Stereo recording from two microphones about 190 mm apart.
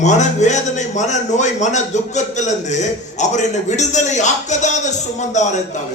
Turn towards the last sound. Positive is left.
turn(degrees=40)  # may be behind; listen again after turning